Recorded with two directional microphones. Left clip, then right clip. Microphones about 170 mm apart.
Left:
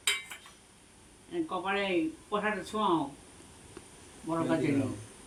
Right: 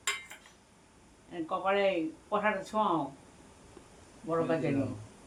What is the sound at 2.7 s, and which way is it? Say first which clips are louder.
Speech: right 1 dB; 55° right (ahead or behind).